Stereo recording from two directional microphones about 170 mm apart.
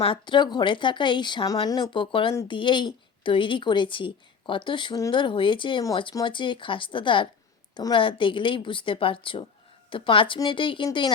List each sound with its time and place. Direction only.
0.0 s speech: 30° left (ahead or behind)